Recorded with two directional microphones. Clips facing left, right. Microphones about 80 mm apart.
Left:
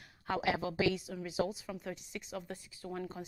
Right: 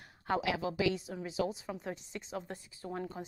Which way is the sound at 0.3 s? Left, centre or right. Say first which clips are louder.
Right 1 dB; right.